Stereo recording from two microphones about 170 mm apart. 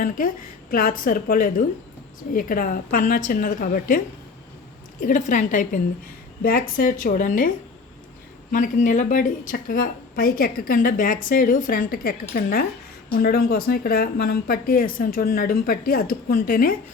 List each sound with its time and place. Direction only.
0.2 s a woman's voice: 50° left (ahead or behind)
8.5 s a woman's voice: 50° left (ahead or behind)